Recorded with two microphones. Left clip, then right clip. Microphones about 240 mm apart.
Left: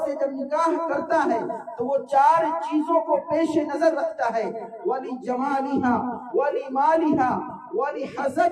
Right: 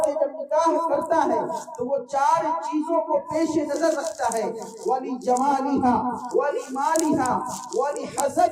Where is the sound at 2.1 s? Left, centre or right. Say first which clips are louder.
Left 3 dB; left.